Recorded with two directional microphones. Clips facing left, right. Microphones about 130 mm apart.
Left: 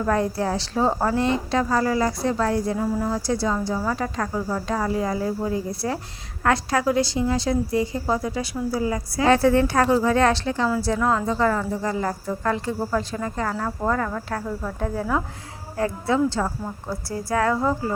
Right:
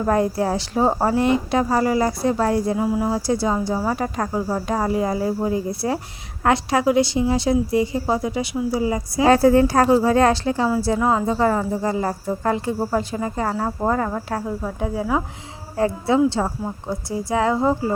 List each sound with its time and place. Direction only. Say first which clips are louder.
0.0 s speech: right 3 dB; 25° right (ahead or behind)
2.7 s speech: right 3 dB; 15° right (ahead or behind)
3.2 s speech: right 3 dB; 25° right (ahead or behind)
9.3 s speech: right 3 dB; 35° right (ahead or behind)
10.9 s speech: right 3 dB; 20° right (ahead or behind)
15.8 s speech: right 4 dB; 25° right (ahead or behind)